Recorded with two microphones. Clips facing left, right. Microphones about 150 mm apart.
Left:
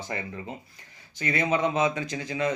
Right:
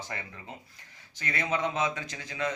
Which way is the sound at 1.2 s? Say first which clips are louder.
Left 5 dB; 15° left (ahead or behind).